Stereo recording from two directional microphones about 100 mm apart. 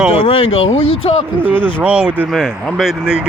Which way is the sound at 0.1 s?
75° left (ahead or behind).